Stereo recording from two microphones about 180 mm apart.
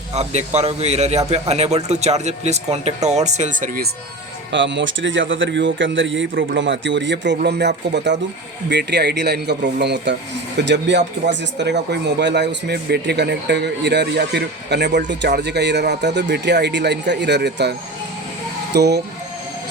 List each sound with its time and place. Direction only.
0.1 s speech: 40° right (ahead or behind)
4.5 s speech: 85° right
7.4 s speech: 70° right (ahead or behind)